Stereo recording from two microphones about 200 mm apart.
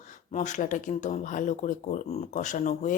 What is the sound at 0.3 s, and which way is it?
Speech, 40° left (ahead or behind).